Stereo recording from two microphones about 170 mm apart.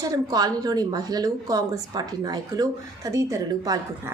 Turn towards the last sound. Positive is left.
turn(degrees=-20)  # may be behind; listen again after turning